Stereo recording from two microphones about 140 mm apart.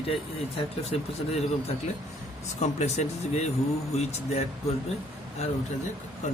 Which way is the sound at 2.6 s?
50° left (ahead or behind).